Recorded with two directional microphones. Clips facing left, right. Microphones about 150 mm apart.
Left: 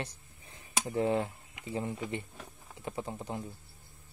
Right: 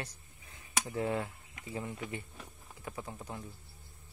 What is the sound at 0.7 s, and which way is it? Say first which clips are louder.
Speech: left 4 dB; 25° left (ahead or behind).